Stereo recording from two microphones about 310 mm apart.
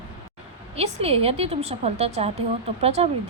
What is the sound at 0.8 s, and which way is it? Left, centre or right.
Speech, centre.